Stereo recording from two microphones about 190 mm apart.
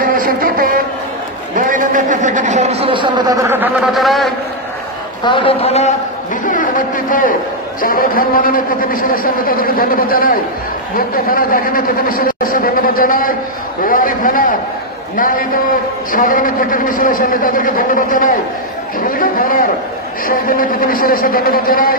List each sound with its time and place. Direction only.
0.0 s a sound: 45° right (ahead or behind); by 3.7 s 10° right (ahead or behind)
3.9 s a man's voice: centre (ahead or behind)
5.2 s a man's voice: 25° left (ahead or behind)
6.4 s a man's voice: 45° left (ahead or behind)